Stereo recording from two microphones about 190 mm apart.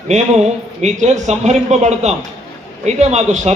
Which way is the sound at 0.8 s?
35° right (ahead or behind).